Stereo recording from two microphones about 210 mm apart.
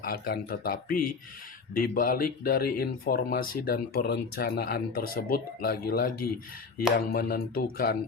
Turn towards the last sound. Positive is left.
turn(degrees=45)  # may be behind; listen again after turning